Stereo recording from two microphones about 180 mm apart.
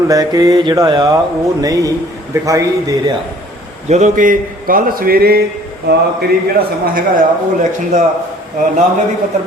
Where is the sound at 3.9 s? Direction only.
45° right (ahead or behind); by 5.4 s 60° right (ahead or behind).